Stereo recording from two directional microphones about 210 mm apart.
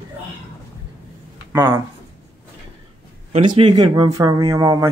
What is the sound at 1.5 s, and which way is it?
Speech, 10° right (ahead or behind).